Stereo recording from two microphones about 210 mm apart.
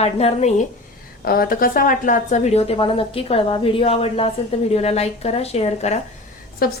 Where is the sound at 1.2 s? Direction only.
45° left (ahead or behind).